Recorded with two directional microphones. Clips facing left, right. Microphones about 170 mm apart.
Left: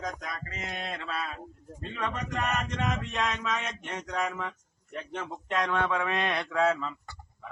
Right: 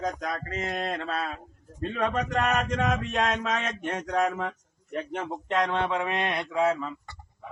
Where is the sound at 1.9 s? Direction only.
60° right (ahead or behind).